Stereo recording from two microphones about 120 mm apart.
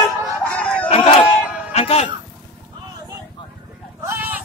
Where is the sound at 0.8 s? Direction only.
55° left (ahead or behind).